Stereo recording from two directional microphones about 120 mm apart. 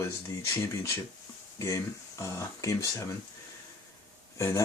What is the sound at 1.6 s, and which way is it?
Speech, 25° left (ahead or behind).